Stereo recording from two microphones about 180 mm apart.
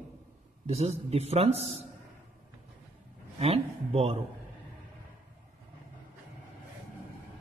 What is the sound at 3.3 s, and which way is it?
Speech, 35° right (ahead or behind).